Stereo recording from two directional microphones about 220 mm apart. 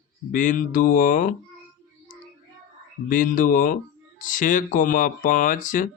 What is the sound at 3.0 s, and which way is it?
Speech, 35° left (ahead or behind).